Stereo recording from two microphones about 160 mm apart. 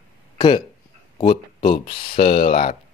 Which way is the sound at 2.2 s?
40° left (ahead or behind).